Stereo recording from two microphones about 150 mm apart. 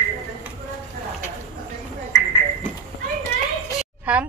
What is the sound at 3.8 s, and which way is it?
Chicken, 10° right (ahead or behind).